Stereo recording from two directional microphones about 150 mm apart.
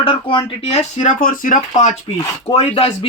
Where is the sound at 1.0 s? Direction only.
65° left (ahead or behind).